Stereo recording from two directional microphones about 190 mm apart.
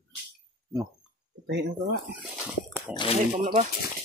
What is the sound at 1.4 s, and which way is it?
Speech, 65° right (ahead or behind).